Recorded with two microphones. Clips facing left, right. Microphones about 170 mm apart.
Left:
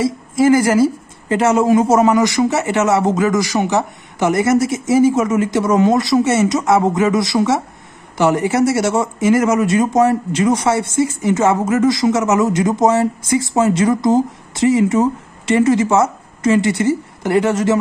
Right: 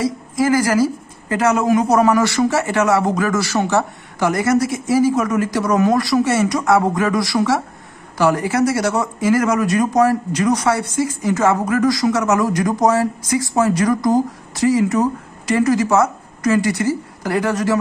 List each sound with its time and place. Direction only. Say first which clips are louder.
0.0 s speech: left 4 dB; 25° left (ahead or behind)